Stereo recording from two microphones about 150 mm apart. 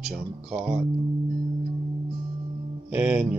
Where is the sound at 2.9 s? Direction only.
10° right (ahead or behind).